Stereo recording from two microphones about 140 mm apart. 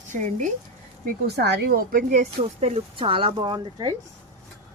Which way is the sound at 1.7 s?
75° right (ahead or behind).